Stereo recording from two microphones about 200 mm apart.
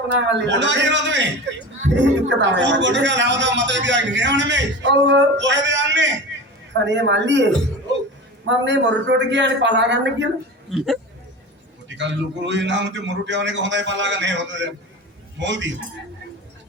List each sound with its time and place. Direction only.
0.1 s speech: 65° right (ahead or behind)
11.9 s speech: 65° right (ahead or behind)